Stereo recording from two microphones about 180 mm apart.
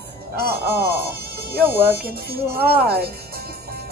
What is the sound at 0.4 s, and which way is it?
Speech, 60° right (ahead or behind).